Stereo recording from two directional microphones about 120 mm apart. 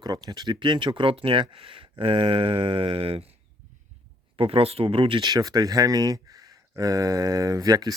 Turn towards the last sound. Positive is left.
turn(degrees=-30)  # may be behind; listen again after turning